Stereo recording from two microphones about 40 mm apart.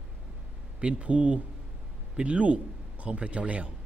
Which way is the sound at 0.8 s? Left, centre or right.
Right.